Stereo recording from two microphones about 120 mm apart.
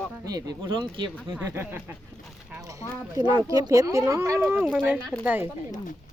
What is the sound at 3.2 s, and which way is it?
Speech, 35° right (ahead or behind).